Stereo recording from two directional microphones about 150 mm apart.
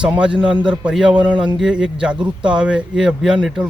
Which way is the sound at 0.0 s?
5° right (ahead or behind).